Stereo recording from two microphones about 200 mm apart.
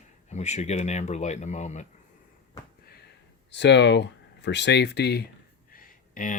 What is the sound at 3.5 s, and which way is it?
Speech, 60° left (ahead or behind).